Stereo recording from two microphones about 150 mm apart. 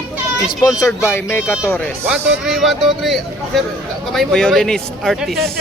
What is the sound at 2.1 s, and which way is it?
Speech, centre (ahead or behind).